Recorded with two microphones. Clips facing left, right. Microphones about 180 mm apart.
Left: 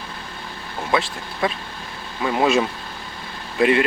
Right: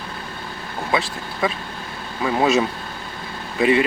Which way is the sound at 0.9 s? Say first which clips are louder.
Left 1 dB; centre (ahead or behind).